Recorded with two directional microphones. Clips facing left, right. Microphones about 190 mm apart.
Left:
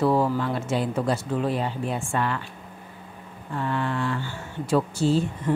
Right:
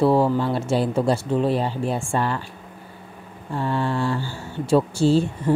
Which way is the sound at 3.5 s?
30° right (ahead or behind).